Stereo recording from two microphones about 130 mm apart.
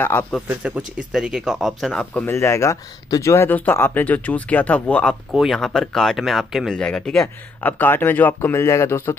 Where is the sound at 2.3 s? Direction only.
20° left (ahead or behind).